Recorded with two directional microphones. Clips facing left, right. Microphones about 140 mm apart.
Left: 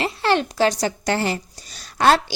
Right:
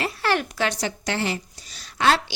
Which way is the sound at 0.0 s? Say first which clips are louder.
Left 4 dB; 25° left (ahead or behind).